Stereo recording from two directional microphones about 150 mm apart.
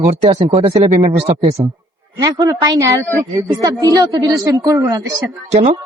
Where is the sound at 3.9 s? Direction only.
25° right (ahead or behind).